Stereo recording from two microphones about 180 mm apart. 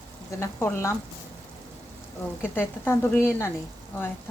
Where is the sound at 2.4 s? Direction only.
15° left (ahead or behind).